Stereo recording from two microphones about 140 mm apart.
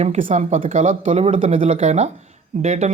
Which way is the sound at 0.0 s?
60° right (ahead or behind).